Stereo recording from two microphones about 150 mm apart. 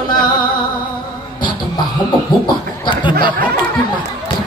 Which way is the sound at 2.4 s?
30° left (ahead or behind).